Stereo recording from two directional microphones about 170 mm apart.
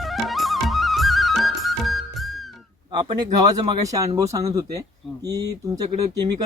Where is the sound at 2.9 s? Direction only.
25° right (ahead or behind).